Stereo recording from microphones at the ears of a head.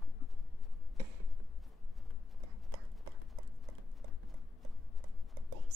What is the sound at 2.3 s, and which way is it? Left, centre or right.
Clip-clop, right.